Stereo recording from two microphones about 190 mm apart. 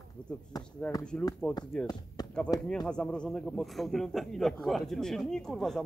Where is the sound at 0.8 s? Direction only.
10° left (ahead or behind).